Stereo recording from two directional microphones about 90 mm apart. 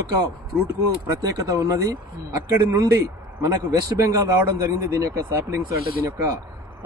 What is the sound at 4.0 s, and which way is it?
Speech, 35° right (ahead or behind).